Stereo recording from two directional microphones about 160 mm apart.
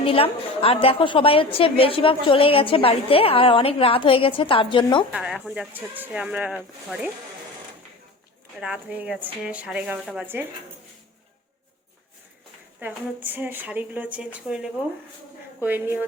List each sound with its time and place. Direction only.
0.0 s a woman's voice: 35° left (ahead or behind)
5.1 s speech: 5° right (ahead or behind)
8.6 s a woman's voice: 5° right (ahead or behind)
12.8 s a woman's voice: 10° right (ahead or behind)